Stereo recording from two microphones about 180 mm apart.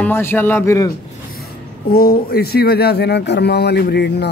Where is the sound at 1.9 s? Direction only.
55° left (ahead or behind).